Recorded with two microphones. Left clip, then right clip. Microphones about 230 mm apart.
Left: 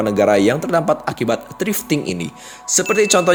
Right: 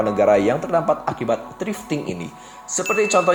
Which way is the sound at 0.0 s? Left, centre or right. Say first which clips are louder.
Left 2 dB; left.